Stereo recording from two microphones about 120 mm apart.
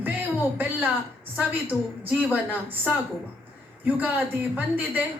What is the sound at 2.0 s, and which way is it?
Speech, 15° right (ahead or behind).